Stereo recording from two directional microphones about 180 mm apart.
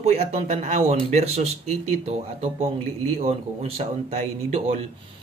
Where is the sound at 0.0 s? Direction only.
40° right (ahead or behind).